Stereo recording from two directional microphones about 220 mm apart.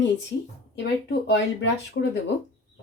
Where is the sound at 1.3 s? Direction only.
50° left (ahead or behind).